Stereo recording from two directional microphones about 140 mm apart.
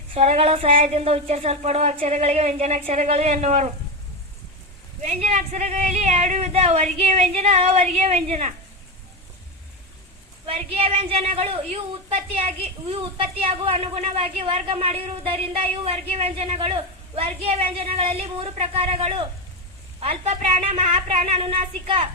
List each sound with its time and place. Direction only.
0.1 s a woman's voice: 45° right (ahead or behind)
5.0 s a woman's voice: 55° right (ahead or behind)
10.4 s a woman's voice: 45° right (ahead or behind)